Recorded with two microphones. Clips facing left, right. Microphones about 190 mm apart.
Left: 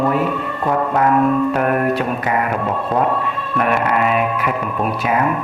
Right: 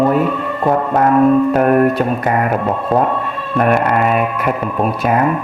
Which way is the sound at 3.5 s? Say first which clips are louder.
Right 4 dB; 45° right (ahead or behind).